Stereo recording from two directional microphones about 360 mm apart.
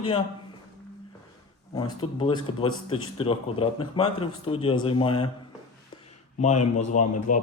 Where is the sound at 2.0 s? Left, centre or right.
Centre.